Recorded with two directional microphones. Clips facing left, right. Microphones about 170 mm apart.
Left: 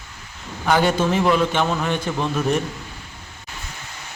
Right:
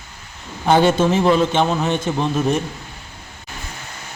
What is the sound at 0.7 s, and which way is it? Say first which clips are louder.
A man's voice: right 4 dB; 25° right (ahead or behind).